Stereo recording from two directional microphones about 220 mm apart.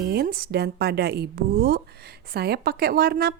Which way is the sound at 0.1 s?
45° right (ahead or behind).